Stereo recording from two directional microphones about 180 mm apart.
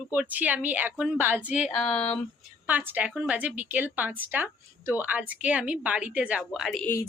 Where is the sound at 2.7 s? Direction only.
10° right (ahead or behind).